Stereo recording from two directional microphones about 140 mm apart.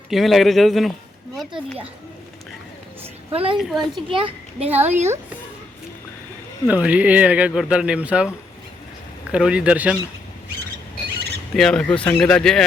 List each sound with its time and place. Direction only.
0.1 s a man's voice: centre (ahead or behind)
3.3 s a child's voice: 40° right (ahead or behind)
3.6 s a man's voice: centre (ahead or behind)
4.1 s a child's voice: 40° right (ahead or behind)
4.9 s speech: 55° right (ahead or behind)
6.7 s speech: 10° right (ahead or behind)
9.3 s speech: 5° right (ahead or behind)
11.5 s a man's voice: 5° left (ahead or behind)